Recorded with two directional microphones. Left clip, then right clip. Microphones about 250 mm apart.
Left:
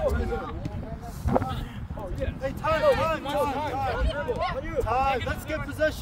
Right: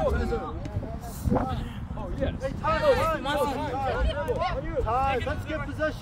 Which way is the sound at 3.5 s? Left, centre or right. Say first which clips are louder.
Left 1 dB; left.